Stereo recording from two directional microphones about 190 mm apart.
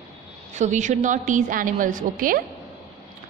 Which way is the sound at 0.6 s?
40° right (ahead or behind).